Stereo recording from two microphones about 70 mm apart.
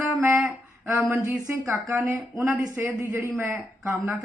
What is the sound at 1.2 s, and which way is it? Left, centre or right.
Speech, right.